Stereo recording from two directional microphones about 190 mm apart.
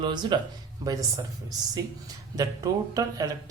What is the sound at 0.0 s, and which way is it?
Speech, 25° right (ahead or behind).